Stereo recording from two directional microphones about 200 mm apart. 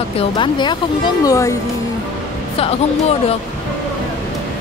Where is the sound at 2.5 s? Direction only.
30° left (ahead or behind).